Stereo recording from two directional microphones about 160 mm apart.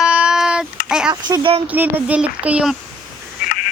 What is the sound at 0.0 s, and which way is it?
Child singing, 5° right (ahead or behind).